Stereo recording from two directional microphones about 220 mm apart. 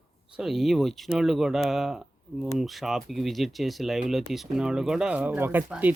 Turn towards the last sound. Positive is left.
turn(degrees=-5)  # may be behind; listen again after turning